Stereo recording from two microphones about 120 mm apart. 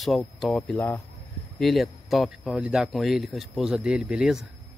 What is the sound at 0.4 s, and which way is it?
Speech, centre (ahead or behind).